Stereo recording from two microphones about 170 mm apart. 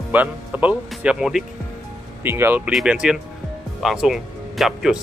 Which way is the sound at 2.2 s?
15° right (ahead or behind).